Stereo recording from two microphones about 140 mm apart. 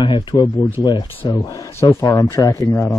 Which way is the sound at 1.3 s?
25° left (ahead or behind).